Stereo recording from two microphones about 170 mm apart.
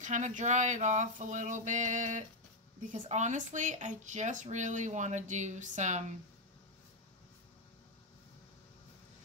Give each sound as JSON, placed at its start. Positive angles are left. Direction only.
{"t": 0.0, "sound": "speech", "side_deg": -45}